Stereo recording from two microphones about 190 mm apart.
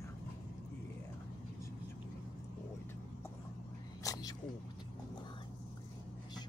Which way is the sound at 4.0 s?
20° left (ahead or behind).